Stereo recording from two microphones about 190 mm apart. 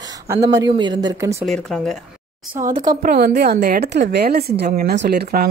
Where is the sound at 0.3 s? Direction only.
20° right (ahead or behind).